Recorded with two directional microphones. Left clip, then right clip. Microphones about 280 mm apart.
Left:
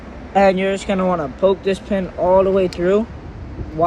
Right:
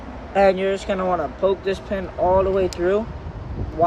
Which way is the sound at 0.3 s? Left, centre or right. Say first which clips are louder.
Left 3 dB; centre.